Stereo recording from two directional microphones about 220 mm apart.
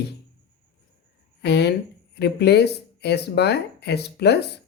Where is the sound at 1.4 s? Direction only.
50° left (ahead or behind).